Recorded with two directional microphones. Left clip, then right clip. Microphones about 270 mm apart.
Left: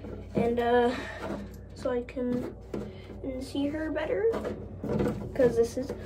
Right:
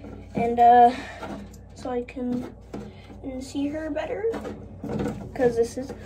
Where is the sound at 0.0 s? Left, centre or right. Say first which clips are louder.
Right 2 dB; centre.